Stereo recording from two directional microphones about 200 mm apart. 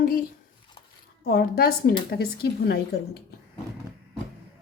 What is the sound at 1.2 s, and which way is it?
Speech, 50° left (ahead or behind).